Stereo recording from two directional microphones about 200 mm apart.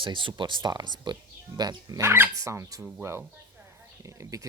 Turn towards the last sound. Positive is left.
turn(degrees=-15)  # may be behind; listen again after turning